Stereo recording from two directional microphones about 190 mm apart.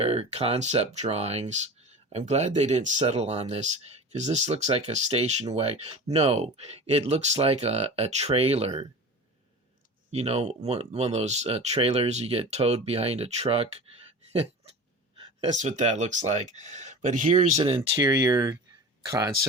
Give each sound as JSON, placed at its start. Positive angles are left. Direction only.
{"t": 0.0, "sound": "speech", "side_deg": -30}
{"t": 10.1, "sound": "speech", "side_deg": -35}
{"t": 15.6, "sound": "speech", "side_deg": -40}